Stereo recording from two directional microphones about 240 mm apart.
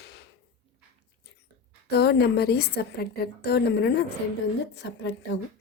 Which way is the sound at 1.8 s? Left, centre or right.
Left.